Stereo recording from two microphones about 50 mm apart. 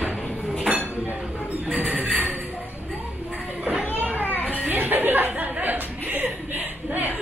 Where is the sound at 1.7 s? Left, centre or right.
Right.